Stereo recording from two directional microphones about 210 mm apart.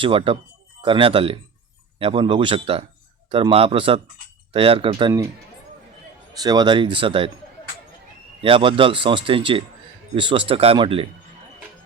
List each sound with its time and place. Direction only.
0.0 s speech: 25° right (ahead or behind)
6.3 s speech: 20° right (ahead or behind)
8.4 s speech: 25° right (ahead or behind)